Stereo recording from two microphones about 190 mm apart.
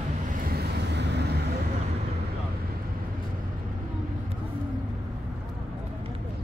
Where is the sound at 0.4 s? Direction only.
55° right (ahead or behind).